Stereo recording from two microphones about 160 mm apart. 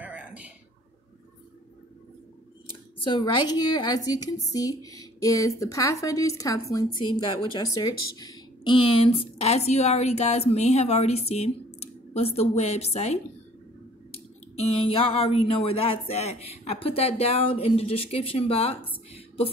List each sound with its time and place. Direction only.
0.0 s a sound: 10° right (ahead or behind)
3.1 s speech: 25° left (ahead or behind)
14.7 s speech: 35° left (ahead or behind)